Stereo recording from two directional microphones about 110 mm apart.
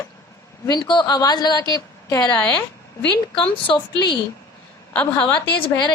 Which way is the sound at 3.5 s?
50° left (ahead or behind).